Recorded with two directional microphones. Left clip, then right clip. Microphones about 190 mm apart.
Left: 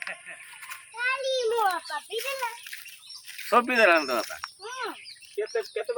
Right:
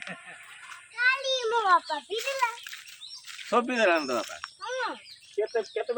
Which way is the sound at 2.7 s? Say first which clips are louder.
Left 2 dB; 60° left (ahead or behind).